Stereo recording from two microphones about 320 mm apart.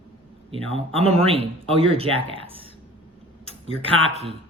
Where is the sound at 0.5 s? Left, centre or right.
Centre.